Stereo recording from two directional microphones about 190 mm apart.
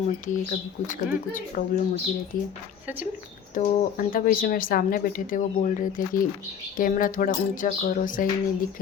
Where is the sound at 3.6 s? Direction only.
45° left (ahead or behind).